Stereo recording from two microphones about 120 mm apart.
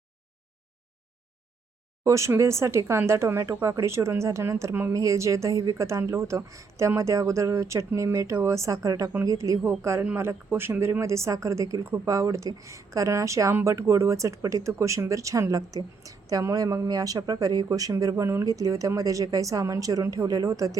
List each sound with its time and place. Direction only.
2.0 s speech: 25° right (ahead or behind)